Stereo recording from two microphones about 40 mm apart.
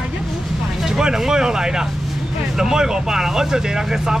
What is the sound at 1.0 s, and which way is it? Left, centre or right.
Speech, centre.